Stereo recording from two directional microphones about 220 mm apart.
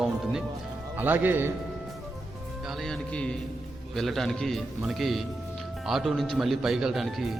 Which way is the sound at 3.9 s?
Centre (ahead or behind).